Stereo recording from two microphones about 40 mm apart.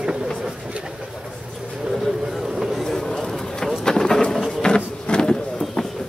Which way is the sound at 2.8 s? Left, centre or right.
Centre.